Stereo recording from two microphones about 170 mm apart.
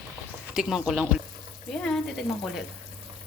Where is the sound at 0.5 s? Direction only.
5° right (ahead or behind).